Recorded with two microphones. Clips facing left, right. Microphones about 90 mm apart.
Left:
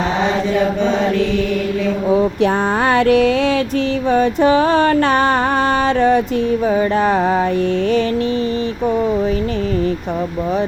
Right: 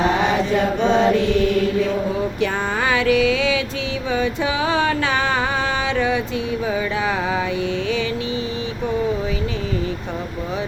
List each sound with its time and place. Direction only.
2.9 s music: 55° left (ahead or behind)
4.1 s mantra: 45° left (ahead or behind)
6.7 s music: 45° left (ahead or behind)